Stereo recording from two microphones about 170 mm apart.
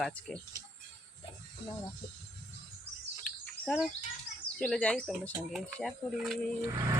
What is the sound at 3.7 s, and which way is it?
Speech, 5° left (ahead or behind).